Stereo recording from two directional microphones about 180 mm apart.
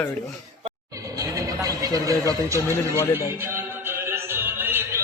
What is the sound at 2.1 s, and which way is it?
Speech, 15° right (ahead or behind).